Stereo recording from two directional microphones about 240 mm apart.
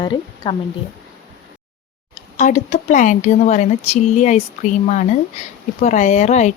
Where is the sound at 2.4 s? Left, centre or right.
Left.